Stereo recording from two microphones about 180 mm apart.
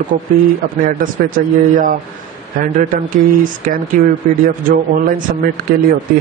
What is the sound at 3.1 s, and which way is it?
Speech, 50° right (ahead or behind).